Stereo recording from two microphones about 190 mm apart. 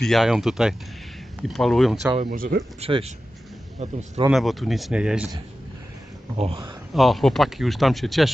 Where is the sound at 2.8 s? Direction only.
30° right (ahead or behind).